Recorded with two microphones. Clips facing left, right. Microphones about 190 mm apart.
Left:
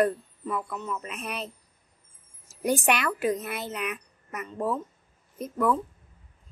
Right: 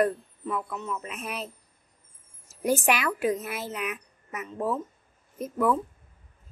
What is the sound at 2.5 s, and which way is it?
Speech, centre (ahead or behind).